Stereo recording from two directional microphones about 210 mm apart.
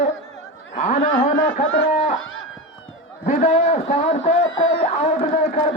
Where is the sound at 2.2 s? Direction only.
70° left (ahead or behind).